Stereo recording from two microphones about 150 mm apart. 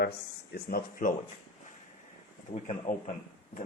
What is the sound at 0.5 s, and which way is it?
Speech, 80° left.